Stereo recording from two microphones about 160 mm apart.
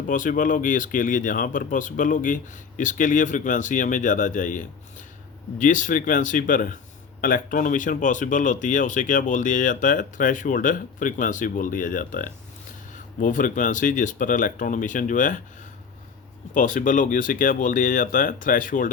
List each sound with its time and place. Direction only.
0.1 s speech: 55° left (ahead or behind)
16.6 s speech: 55° left (ahead or behind)